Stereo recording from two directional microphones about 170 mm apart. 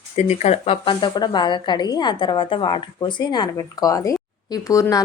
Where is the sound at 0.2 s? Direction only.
40° left (ahead or behind).